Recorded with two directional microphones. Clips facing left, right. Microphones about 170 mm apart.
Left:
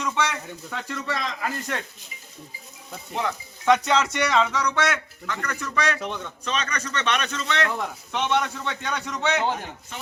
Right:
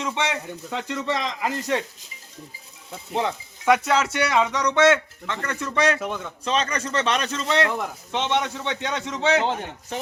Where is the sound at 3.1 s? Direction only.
25° right (ahead or behind).